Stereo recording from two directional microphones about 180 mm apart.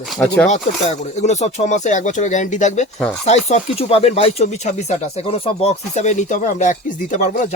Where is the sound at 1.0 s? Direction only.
40° left (ahead or behind).